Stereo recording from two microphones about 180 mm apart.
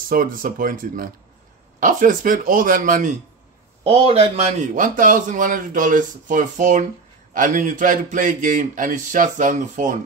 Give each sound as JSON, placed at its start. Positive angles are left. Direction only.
{"t": 0.1, "sound": "a man's voice", "side_deg": -50}
{"t": 3.9, "sound": "a man's voice", "side_deg": -30}